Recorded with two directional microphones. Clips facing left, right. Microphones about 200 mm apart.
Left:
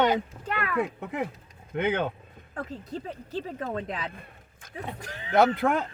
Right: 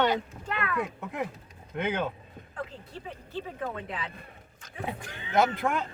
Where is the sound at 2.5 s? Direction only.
40° left (ahead or behind).